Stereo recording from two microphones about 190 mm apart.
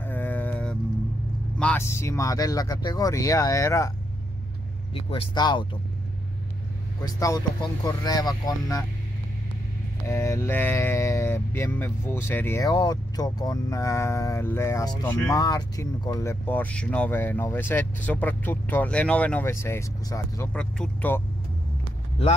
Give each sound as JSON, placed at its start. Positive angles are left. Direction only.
{"t": 0.0, "sound": "vehicle", "side_deg": 10}
{"t": 1.6, "sound": "speech", "side_deg": 10}
{"t": 4.9, "sound": "speech", "side_deg": 30}
{"t": 7.0, "sound": "speech", "side_deg": 20}
{"t": 10.0, "sound": "speech", "side_deg": 15}